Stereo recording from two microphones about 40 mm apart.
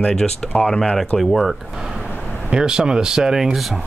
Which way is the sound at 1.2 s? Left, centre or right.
Centre.